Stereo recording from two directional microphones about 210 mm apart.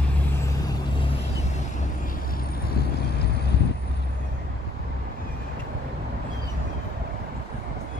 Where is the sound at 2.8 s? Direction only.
50° left (ahead or behind).